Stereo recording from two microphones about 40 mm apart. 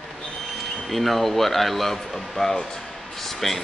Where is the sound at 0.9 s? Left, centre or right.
Centre.